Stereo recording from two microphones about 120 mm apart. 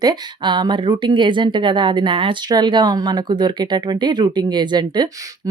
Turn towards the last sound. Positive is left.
turn(degrees=-35)  # may be behind; listen again after turning